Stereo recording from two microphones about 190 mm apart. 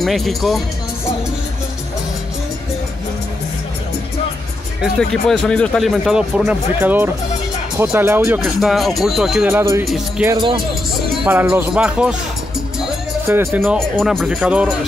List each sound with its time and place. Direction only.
0.0 s speech: centre (ahead or behind)
4.9 s speech: 5° left (ahead or behind); by 8.4 s 15° right (ahead or behind)
8.4 s speech: centre (ahead or behind)
9.8 s speech: centre (ahead or behind)
10.2 s speech: 25° right (ahead or behind)
11.2 s speech: 10° right (ahead or behind)
12.8 s music: 5° right (ahead or behind)
13.6 s speech: centre (ahead or behind)